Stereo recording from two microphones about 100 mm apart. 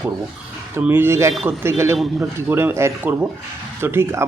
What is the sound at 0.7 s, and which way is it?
Speech, 20° right (ahead or behind).